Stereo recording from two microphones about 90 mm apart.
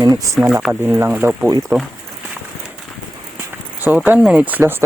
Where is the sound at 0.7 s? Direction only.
25° right (ahead or behind).